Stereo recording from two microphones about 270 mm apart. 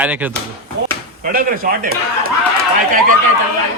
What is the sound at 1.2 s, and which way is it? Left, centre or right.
Speech, right.